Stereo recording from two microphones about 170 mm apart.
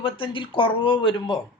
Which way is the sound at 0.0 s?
30° left (ahead or behind).